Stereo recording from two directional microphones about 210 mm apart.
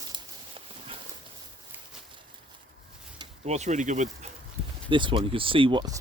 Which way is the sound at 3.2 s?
30° right (ahead or behind).